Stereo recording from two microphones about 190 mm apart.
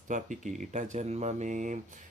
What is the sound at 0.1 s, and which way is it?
Speech, 40° right (ahead or behind).